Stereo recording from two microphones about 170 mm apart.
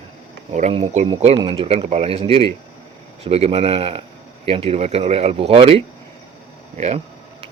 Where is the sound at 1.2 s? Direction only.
35° right (ahead or behind).